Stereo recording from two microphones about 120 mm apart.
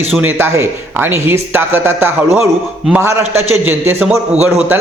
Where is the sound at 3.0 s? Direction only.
20° right (ahead or behind).